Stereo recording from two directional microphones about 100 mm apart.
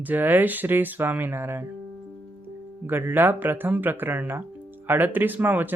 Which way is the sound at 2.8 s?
20° right (ahead or behind).